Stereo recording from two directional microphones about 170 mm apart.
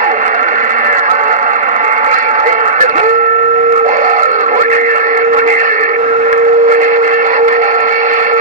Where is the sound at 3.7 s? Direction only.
45° right (ahead or behind).